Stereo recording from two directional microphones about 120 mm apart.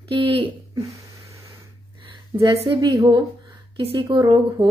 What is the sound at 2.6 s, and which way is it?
Speech, 45° right (ahead or behind).